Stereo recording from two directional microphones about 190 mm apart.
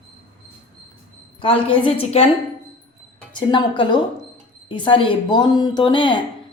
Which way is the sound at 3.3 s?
25° left (ahead or behind).